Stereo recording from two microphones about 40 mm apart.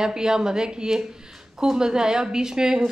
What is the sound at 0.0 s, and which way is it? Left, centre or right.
A woman's voice, centre.